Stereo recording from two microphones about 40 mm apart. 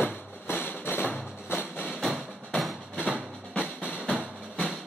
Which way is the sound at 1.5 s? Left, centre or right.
Left.